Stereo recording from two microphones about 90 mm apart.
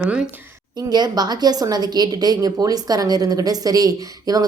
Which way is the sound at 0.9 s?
50° right (ahead or behind).